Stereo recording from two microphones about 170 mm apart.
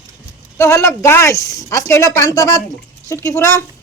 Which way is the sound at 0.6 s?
15° left (ahead or behind).